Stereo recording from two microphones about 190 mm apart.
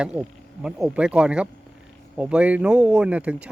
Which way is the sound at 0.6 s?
5° right (ahead or behind).